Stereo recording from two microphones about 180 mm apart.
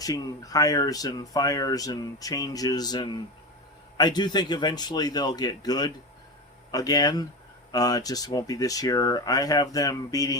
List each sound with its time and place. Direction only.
0.0 s speech: 20° left (ahead or behind)